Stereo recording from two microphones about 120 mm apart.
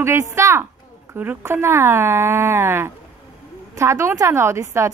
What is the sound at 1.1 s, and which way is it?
A woman's voice, 15° right (ahead or behind).